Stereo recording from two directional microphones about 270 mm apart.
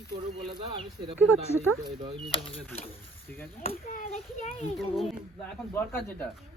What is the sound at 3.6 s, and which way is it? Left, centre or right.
A child's voice, left.